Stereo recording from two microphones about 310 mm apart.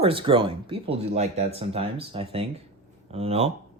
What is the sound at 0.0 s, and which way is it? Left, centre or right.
Speech, centre.